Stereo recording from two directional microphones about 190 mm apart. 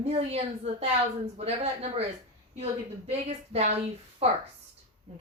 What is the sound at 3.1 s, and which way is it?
A woman's voice, 35° right (ahead or behind).